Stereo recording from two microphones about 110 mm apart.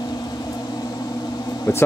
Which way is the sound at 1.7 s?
25° left (ahead or behind).